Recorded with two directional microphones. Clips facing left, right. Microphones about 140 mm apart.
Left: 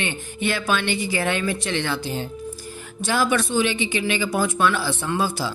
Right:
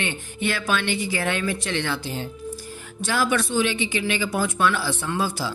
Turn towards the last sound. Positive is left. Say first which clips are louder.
# left 2 dB
turn(degrees=25)  # may be behind; listen again after turning